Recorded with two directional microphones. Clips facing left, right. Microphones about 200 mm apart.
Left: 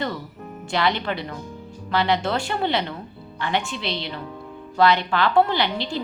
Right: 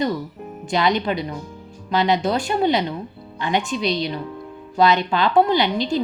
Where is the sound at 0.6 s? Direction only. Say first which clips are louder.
Right 3 dB; 20° right (ahead or behind).